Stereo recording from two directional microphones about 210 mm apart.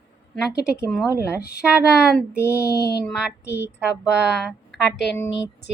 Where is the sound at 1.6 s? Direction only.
5° left (ahead or behind).